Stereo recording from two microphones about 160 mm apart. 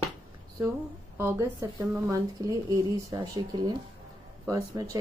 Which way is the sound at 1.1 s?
20° right (ahead or behind).